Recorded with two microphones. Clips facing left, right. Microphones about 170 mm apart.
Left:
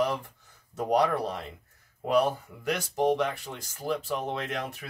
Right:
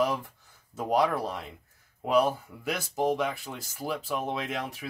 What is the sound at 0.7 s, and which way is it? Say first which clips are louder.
Speech: left 1 dB; 5° right (ahead or behind).